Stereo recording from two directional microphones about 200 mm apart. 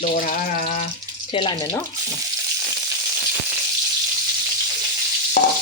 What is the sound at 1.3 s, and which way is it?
Speech, 20° left (ahead or behind).